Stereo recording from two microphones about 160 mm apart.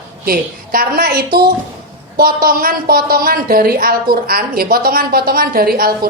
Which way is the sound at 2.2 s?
65° right (ahead or behind).